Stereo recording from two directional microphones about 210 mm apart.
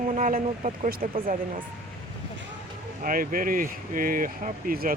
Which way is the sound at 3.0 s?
40° right (ahead or behind).